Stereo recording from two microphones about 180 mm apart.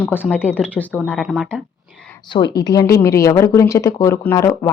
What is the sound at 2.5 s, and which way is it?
A woman's voice, 20° left (ahead or behind).